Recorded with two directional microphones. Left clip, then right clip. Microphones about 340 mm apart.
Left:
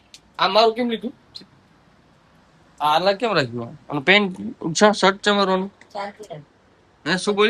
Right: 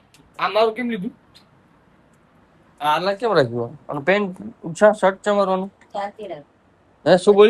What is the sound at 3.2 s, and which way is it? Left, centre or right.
Speech, centre.